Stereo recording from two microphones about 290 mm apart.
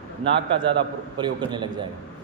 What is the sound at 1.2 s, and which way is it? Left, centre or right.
Speech, centre.